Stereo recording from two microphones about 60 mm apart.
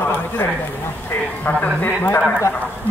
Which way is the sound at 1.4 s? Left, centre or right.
Left.